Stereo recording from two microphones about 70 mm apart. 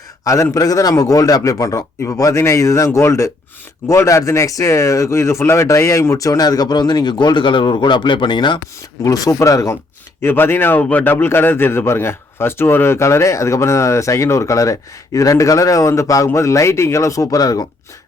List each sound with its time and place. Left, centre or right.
0.5 s a man's voice: left
9.0 s a man's voice: left
10.2 s a man's voice: left